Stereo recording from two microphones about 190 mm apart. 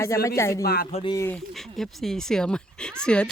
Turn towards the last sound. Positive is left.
turn(degrees=5)  # may be behind; listen again after turning